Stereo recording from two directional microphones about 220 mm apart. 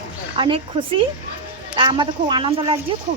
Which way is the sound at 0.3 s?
20° right (ahead or behind).